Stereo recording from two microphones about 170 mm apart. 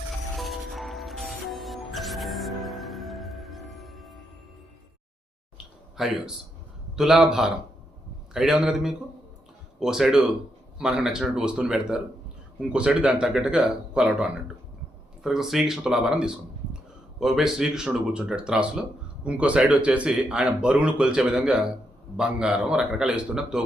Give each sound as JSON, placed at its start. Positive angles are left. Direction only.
{"t": 0.3, "sound": "music", "side_deg": 0}
{"t": 6.0, "sound": "speech", "side_deg": 0}